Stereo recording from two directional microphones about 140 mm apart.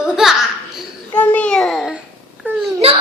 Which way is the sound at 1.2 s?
10° left (ahead or behind).